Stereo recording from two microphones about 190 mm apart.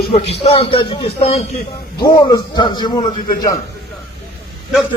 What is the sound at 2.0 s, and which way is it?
A man's voice, 20° left (ahead or behind).